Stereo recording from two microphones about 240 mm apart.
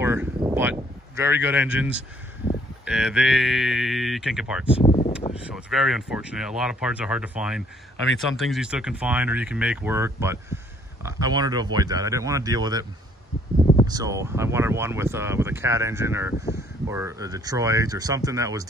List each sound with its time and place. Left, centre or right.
0.0 s speech: centre
4.8 s a sound: left
5.3 s speech: centre
13.8 s speech: centre